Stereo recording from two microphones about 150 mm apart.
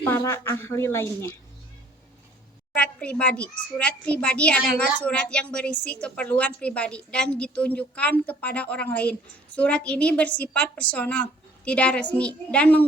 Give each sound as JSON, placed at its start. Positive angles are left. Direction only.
{"t": 0.0, "sound": "a woman's voice", "side_deg": 15}
{"t": 2.7, "sound": "a woman's voice", "side_deg": 5}